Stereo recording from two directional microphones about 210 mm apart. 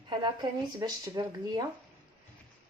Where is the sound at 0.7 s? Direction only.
20° right (ahead or behind).